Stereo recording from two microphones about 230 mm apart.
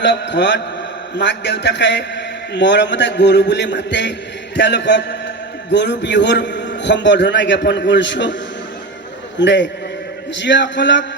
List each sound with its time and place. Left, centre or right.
0.0 s a man's voice: left
9.4 s a man's voice: left